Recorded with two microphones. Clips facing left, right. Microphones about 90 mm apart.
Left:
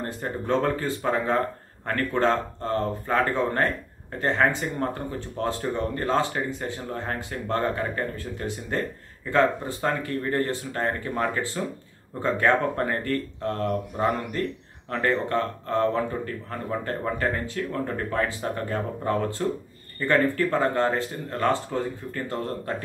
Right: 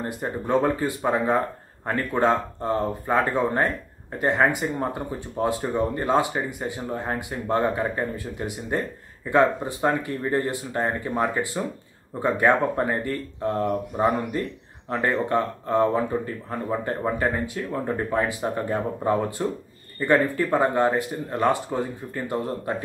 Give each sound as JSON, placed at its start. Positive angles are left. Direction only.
{"t": 0.0, "sound": "speech", "side_deg": -15}